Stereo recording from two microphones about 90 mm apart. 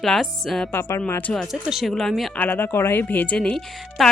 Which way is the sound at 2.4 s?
20° left (ahead or behind).